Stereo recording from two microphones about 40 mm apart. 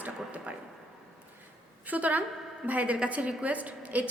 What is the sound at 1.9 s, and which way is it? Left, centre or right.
A woman's voice, right.